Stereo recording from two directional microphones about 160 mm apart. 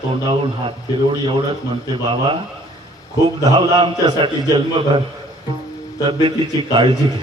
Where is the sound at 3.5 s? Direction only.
25° right (ahead or behind).